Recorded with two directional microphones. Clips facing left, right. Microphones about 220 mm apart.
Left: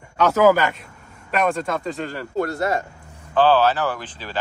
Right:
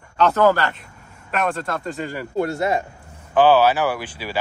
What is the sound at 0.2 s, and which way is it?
Speech, 5° left (ahead or behind).